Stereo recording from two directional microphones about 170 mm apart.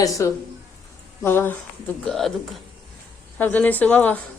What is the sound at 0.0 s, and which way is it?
A woman's voice, 20° left (ahead or behind).